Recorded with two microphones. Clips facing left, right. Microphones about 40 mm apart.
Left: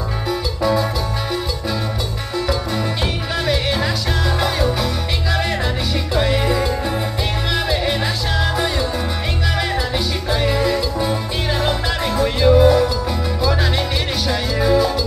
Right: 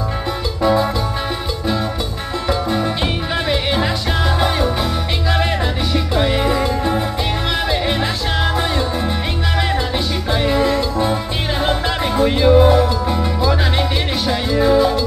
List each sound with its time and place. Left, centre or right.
0.6 s music: centre
2.4 s music: centre
6.1 s music: centre
10.4 s music: centre